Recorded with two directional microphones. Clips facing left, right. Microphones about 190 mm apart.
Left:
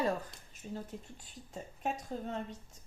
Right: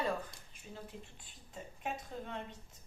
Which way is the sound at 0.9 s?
45° left (ahead or behind).